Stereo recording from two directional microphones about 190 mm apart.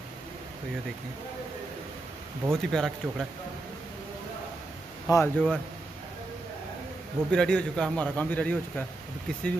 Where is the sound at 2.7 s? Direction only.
Centre (ahead or behind).